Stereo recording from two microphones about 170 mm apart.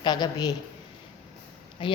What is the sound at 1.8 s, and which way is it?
Speech, 30° left (ahead or behind).